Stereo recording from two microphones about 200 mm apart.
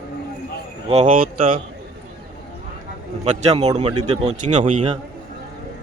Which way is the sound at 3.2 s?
30° right (ahead or behind).